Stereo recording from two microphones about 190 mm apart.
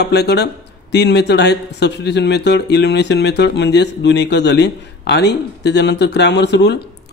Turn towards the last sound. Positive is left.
turn(degrees=65)  # may be behind; listen again after turning